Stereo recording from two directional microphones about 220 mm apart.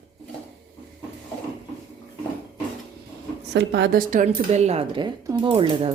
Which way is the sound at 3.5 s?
50° right (ahead or behind).